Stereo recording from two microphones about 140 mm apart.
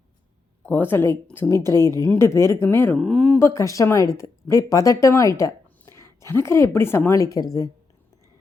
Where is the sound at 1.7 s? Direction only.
25° right (ahead or behind).